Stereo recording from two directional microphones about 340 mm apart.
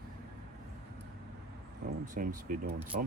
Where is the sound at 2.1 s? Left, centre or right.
Right.